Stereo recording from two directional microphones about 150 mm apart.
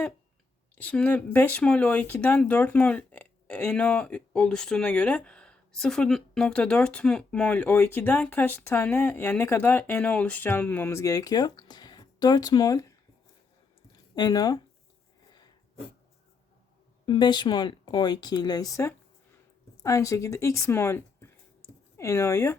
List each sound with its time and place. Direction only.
0.8 s speech: 10° left (ahead or behind)
14.2 s speech: 25° left (ahead or behind)
17.1 s speech: 30° left (ahead or behind)